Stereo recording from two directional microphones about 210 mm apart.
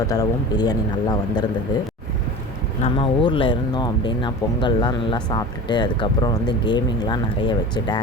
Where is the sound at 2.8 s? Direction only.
25° left (ahead or behind).